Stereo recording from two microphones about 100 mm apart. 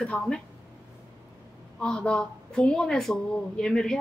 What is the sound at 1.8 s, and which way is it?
A woman's voice, 10° left (ahead or behind).